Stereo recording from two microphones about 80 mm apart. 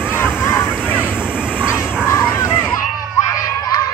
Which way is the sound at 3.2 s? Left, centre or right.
Left.